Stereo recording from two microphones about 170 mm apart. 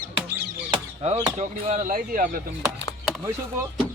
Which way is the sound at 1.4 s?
45° right (ahead or behind).